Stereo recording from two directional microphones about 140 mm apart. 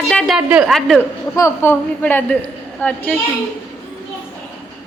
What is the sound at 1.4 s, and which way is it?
A woman's voice, 15° left (ahead or behind).